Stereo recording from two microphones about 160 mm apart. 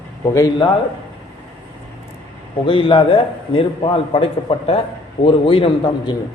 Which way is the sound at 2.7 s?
35° left (ahead or behind).